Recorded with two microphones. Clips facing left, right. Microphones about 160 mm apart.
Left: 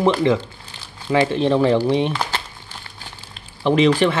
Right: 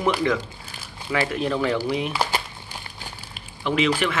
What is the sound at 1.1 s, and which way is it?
Speech, 25° left (ahead or behind).